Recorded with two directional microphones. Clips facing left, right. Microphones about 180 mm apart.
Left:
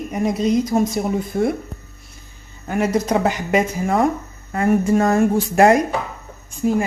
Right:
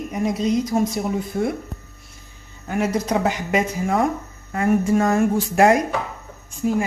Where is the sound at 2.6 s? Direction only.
50° left (ahead or behind).